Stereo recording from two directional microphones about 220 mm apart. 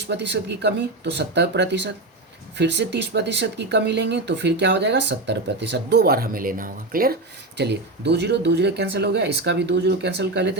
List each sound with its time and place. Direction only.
0.1 s speech: 50° right (ahead or behind)